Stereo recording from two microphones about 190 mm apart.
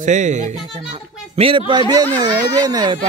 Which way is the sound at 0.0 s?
40° right (ahead or behind).